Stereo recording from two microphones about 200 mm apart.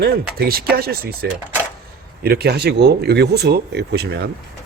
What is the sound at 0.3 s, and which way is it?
Speech, 50° right (ahead or behind).